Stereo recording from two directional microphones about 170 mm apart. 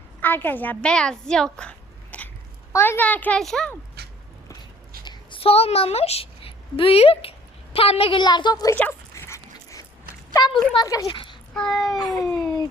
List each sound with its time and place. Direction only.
0.2 s a woman's voice: 10° left (ahead or behind)
4.0 s a sound: 70° right (ahead or behind)
5.0 s a woman's voice: 30° left (ahead or behind)
8.7 s dog: 10° left (ahead or behind)
10.3 s speech: 25° left (ahead or behind)
11.5 s speech: centre (ahead or behind)